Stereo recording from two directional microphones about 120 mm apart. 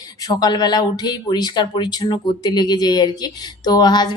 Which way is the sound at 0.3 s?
35° left (ahead or behind).